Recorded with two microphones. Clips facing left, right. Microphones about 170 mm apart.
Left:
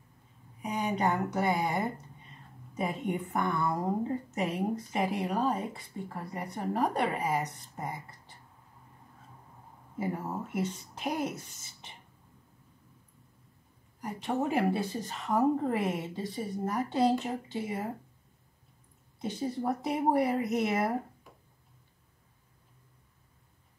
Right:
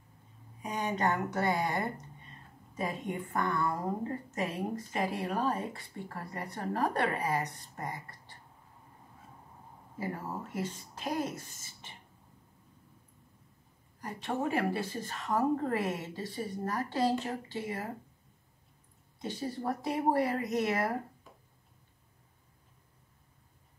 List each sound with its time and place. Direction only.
0.6 s a woman's voice: 10° left (ahead or behind)
2.8 s a woman's voice: 15° left (ahead or behind)
9.9 s a woman's voice: 20° left (ahead or behind)
11.0 s a woman's voice: 10° left (ahead or behind)
14.0 s a woman's voice: 20° left (ahead or behind)
19.3 s a woman's voice: 20° left (ahead or behind)
20.2 s speech: 5° left (ahead or behind)
20.6 s speech: 20° left (ahead or behind)